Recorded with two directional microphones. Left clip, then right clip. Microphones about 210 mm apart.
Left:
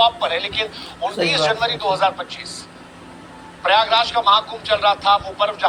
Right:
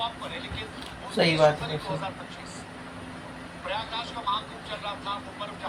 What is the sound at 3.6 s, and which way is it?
A man's voice, 45° left (ahead or behind).